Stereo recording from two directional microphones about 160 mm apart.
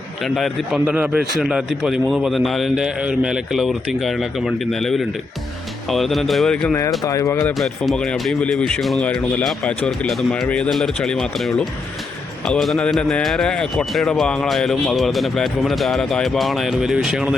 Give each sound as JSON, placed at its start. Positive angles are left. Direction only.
{"t": 0.2, "sound": "speech", "side_deg": 0}
{"t": 7.0, "sound": "speech", "side_deg": 20}
{"t": 7.6, "sound": "speech", "side_deg": 5}